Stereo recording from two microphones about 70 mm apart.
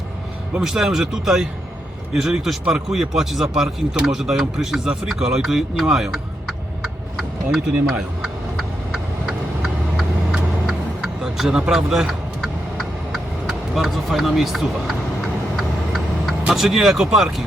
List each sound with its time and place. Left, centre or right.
0.5 s a man's voice: centre
7.2 s vehicle: centre
11.2 s speech: centre
12.8 s vehicle: centre
15.5 s clock: centre
16.5 s speech: centre